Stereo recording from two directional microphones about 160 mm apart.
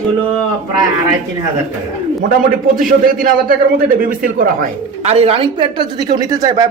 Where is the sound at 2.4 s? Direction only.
60° right (ahead or behind).